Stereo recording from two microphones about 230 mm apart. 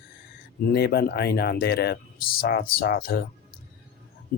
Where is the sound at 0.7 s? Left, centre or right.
Left.